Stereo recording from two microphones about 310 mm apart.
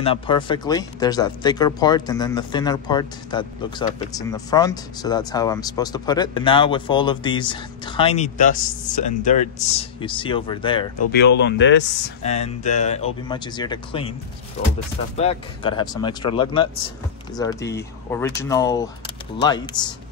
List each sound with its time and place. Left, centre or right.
0.0 s speech: centre
11.1 s speech: left
12.2 s speech: left
15.1 s speech: centre